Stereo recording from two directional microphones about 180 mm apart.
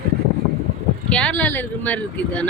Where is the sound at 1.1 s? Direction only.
5° left (ahead or behind).